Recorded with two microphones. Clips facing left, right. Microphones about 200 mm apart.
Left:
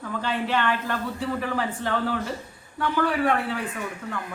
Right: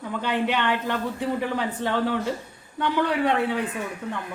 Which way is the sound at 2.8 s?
20° right (ahead or behind).